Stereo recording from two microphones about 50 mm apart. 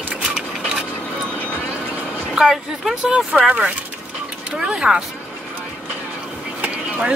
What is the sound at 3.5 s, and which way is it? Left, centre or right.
Speech, right.